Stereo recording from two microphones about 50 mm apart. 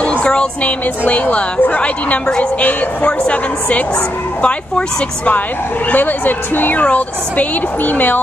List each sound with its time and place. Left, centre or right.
0.2 s speech: centre
1.0 s a woman's voice: left
5.9 s a woman's voice: left